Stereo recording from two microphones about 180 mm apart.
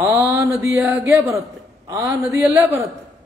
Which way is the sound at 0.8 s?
Centre (ahead or behind).